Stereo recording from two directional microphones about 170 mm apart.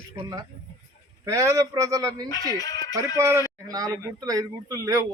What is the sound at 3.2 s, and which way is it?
Speech, 20° right (ahead or behind).